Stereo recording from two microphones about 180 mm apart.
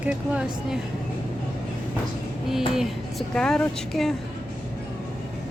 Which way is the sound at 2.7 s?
5° left (ahead or behind).